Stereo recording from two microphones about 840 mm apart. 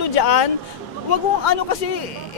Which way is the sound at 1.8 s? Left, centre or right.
Left.